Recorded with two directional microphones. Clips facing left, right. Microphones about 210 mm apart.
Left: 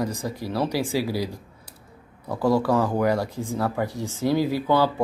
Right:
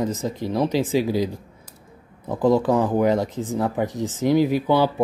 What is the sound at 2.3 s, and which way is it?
Speech, 20° right (ahead or behind).